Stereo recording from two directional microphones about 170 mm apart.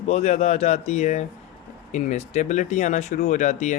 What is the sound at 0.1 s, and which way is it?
Speech, 40° left (ahead or behind).